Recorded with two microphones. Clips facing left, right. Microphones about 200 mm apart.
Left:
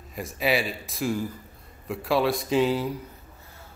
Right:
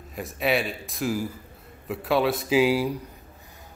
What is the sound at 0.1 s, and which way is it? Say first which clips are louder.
A man's voice: even; centre (ahead or behind).